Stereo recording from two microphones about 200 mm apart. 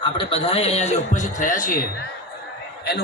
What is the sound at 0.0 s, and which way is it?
A man's voice, 25° left (ahead or behind).